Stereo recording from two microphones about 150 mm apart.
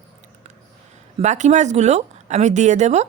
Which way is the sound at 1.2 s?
50° right (ahead or behind).